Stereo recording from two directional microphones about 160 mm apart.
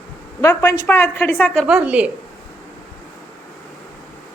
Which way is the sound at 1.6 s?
5° right (ahead or behind).